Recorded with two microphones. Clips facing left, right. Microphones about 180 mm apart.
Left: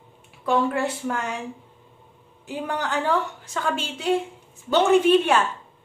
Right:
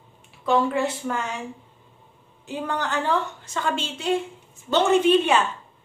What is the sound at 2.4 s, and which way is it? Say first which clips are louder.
A woman's voice: even; 5° left (ahead or behind).